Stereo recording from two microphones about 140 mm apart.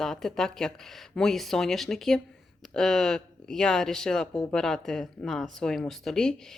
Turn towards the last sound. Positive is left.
turn(degrees=5)  # may be behind; listen again after turning